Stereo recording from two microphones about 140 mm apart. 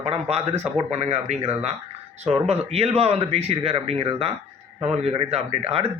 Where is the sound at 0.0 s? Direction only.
50° right (ahead or behind).